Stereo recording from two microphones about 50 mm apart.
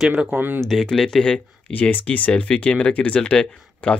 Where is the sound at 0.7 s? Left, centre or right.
Centre.